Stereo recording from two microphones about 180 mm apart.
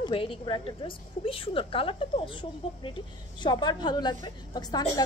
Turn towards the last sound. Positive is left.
turn(degrees=20)  # may be behind; listen again after turning